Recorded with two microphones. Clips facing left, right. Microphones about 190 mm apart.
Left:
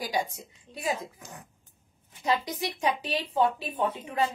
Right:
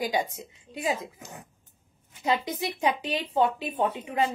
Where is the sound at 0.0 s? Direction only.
20° right (ahead or behind).